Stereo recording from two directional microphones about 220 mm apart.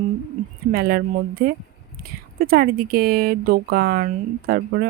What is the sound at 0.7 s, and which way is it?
Speech, 45° right (ahead or behind).